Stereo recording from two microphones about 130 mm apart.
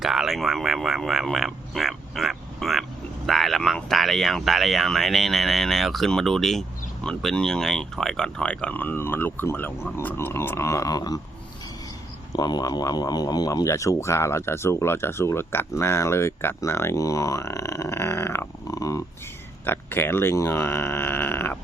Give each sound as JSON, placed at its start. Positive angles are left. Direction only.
{"t": 0.0, "sound": "speech", "side_deg": 0}
{"t": 12.3, "sound": "speech", "side_deg": 30}
{"t": 19.6, "sound": "speech", "side_deg": 15}